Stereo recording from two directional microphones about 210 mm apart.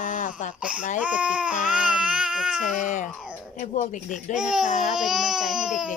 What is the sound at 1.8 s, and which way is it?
Baby cry, 5° right (ahead or behind).